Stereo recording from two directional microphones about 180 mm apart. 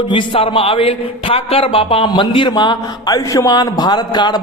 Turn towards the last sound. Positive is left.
turn(degrees=25)  # may be behind; listen again after turning